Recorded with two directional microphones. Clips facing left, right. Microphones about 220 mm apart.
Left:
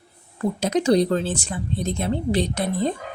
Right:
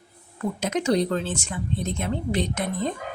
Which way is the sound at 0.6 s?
35° left (ahead or behind).